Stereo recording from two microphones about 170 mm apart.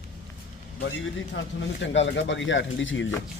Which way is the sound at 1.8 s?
90° left.